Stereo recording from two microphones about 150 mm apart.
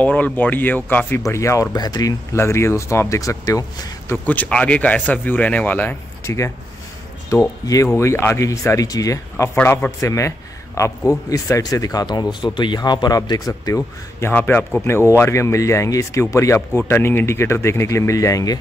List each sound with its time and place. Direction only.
0.0 s a man's voice: 10° left (ahead or behind)
4.3 s a man's voice: 10° left (ahead or behind)